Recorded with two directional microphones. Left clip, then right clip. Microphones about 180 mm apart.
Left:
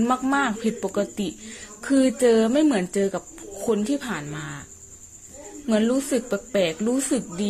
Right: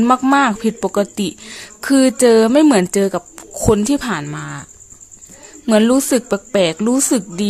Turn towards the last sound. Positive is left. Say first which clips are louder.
# right 8 dB
turn(degrees=-35)  # may be behind; listen again after turning